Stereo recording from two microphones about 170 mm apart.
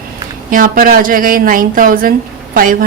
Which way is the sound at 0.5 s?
55° right (ahead or behind).